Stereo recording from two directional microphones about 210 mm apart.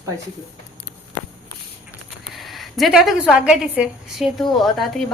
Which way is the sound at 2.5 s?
Centre (ahead or behind).